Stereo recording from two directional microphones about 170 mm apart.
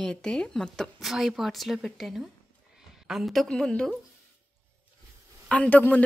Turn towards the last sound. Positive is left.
turn(degrees=10)  # may be behind; listen again after turning